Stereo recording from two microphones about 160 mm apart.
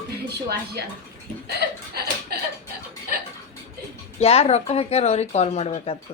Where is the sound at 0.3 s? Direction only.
90° right.